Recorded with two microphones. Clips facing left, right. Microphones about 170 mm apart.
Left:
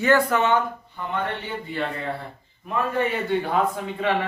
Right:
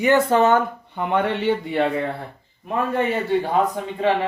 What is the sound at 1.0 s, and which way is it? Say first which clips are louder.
Speech: right 7 dB; 75° right (ahead or behind).